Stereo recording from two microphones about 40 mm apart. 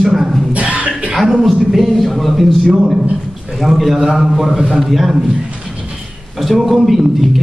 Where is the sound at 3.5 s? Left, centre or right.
Centre.